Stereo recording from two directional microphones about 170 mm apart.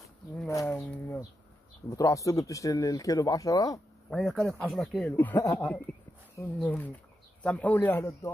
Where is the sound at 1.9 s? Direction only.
20° left (ahead or behind).